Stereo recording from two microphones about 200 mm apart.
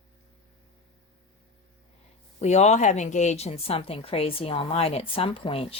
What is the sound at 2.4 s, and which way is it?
Speech, 35° left (ahead or behind).